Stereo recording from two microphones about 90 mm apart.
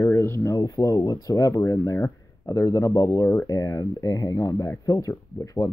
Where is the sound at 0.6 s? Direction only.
40° left (ahead or behind).